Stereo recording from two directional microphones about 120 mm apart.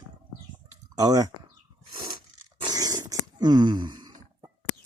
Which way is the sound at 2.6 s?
30° right (ahead or behind).